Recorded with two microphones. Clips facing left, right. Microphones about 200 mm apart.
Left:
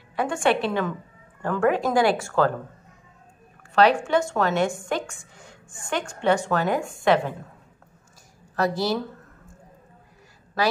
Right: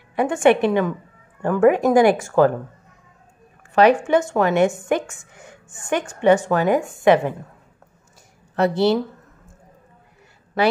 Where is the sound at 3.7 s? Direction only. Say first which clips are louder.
Right 4 dB; 15° right (ahead or behind).